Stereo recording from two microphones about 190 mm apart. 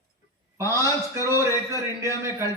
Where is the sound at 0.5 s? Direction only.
15° right (ahead or behind).